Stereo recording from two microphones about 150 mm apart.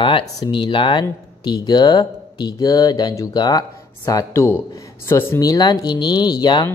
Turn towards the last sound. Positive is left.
turn(degrees=30)  # may be behind; listen again after turning